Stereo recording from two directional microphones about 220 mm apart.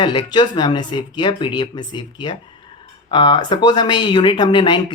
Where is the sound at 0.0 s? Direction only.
20° left (ahead or behind).